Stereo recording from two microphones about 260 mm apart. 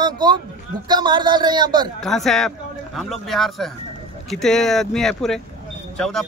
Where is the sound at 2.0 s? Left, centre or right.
Centre.